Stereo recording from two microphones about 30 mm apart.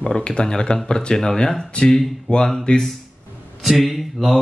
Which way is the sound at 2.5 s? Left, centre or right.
Left.